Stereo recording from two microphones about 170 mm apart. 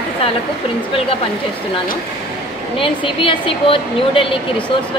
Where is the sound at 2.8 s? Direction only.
30° left (ahead or behind).